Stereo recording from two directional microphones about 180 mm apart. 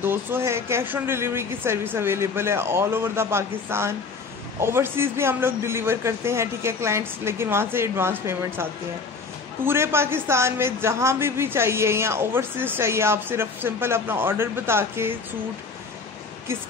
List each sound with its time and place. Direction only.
0.0 s speech: 10° right (ahead or behind)
9.7 s speech: 15° right (ahead or behind)